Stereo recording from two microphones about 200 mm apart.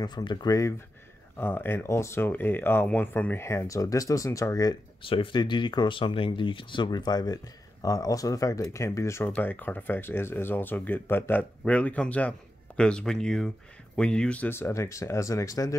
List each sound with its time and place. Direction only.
0.0 s speech: 20° left (ahead or behind)